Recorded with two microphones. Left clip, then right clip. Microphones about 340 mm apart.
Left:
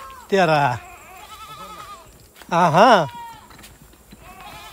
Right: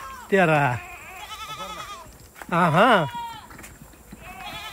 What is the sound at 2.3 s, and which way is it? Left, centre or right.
Speech, centre.